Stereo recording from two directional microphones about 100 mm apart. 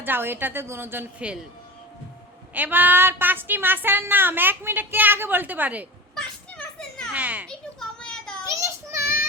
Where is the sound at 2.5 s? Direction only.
20° right (ahead or behind).